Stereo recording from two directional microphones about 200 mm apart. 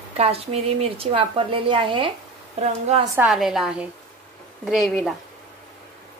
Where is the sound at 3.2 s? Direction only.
Centre (ahead or behind).